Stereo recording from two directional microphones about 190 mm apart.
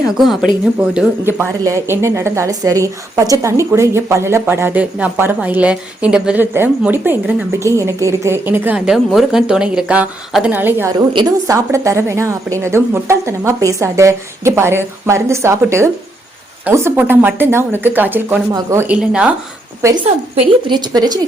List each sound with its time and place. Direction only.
0.8 s a woman's voice: 10° right (ahead or behind)
10.9 s speech: 25° right (ahead or behind); by 19.3 s 5° right (ahead or behind)
20.3 s speech: 25° right (ahead or behind)